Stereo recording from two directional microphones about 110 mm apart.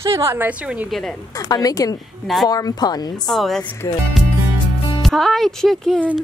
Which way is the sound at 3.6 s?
25° left (ahead or behind).